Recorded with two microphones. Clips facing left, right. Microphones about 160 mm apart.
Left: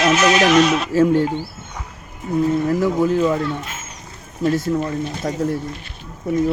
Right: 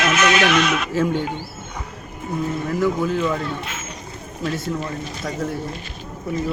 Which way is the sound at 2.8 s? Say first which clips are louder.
Left 3 dB; 35° left (ahead or behind).